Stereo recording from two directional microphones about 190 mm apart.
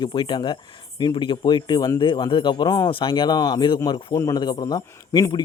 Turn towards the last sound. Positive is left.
turn(degrees=20)  # may be behind; listen again after turning